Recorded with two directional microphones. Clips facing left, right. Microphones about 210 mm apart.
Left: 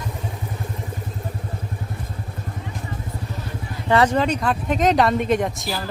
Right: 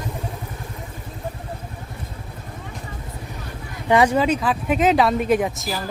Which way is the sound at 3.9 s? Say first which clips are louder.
Right 1 dB; 10° right (ahead or behind).